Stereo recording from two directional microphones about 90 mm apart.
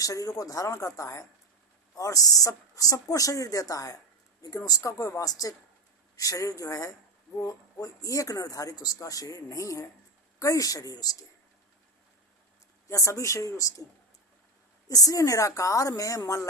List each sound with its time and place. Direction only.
0.0 s speech: 40° left (ahead or behind)
12.9 s speech: 35° left (ahead or behind)
14.8 s speech: 40° left (ahead or behind)